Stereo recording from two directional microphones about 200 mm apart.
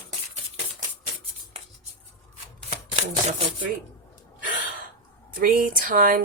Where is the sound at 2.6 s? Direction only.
30° right (ahead or behind).